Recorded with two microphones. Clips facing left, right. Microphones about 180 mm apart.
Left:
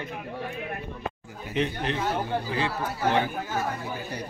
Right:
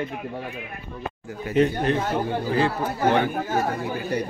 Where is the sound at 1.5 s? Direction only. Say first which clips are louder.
Right 7 dB; 45° right (ahead or behind).